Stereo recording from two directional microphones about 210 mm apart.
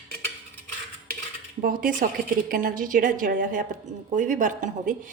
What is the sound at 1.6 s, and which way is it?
A woman's voice, 40° right (ahead or behind).